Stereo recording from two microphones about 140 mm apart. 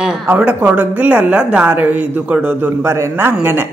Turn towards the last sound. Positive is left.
turn(degrees=-15)  # may be behind; listen again after turning